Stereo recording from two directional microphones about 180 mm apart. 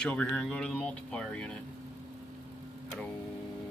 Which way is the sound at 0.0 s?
5° left (ahead or behind).